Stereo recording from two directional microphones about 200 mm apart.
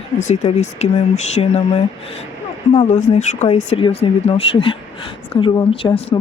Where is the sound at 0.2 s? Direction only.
35° left (ahead or behind).